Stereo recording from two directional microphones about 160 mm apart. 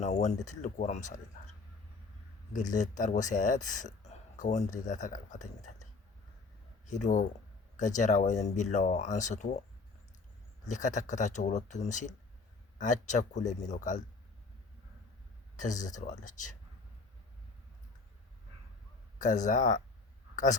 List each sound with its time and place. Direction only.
0.0 s speech: 45° left (ahead or behind)
2.5 s speech: 50° left (ahead or behind)
6.8 s speech: 50° left (ahead or behind)
10.7 s speech: 50° left (ahead or behind)
15.5 s speech: 50° left (ahead or behind)
19.2 s speech: 50° left (ahead or behind)